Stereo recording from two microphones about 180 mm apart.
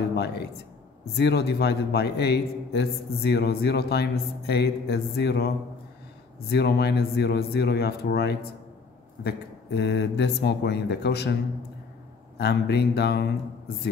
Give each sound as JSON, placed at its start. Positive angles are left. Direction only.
{"t": 0.1, "sound": "speech", "side_deg": 65}
{"t": 6.5, "sound": "speech", "side_deg": 65}
{"t": 12.4, "sound": "speech", "side_deg": 70}